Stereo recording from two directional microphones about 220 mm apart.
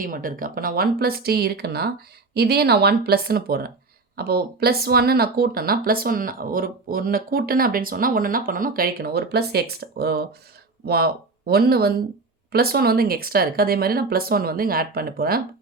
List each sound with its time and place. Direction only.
0.0 s speech: 40° right (ahead or behind)